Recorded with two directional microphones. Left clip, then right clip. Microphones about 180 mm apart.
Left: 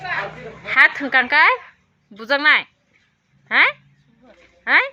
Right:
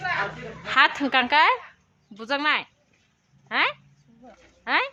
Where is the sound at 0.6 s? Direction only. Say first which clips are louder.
Left 5 dB; 20° right (ahead or behind).